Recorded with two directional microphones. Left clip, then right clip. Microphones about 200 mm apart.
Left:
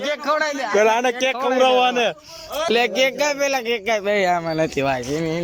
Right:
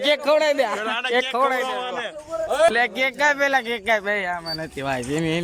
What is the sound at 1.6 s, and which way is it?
Speech, 50° left (ahead or behind).